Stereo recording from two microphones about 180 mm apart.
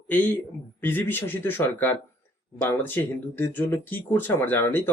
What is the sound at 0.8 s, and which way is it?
Speech, 10° left (ahead or behind).